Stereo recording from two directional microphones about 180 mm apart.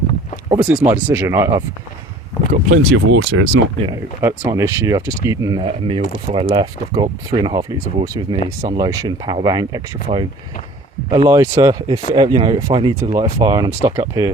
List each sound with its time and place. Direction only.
0.5 s speech: 10° right (ahead or behind)
2.5 s speech: 50° right (ahead or behind)
2.9 s speech: 80° right
4.2 s speech: 15° right (ahead or behind)